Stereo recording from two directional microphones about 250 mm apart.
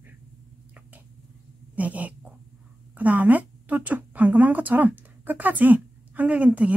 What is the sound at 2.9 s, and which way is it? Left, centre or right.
Speech, centre.